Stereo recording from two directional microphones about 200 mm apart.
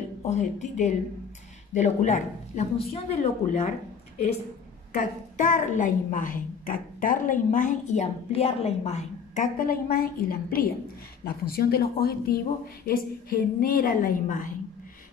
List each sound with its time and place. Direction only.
0.2 s a woman's voice: 35° left (ahead or behind)
4.9 s a woman's voice: 40° left (ahead or behind)